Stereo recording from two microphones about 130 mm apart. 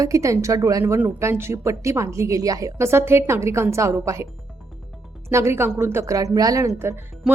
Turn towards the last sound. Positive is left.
turn(degrees=-20)  # may be behind; listen again after turning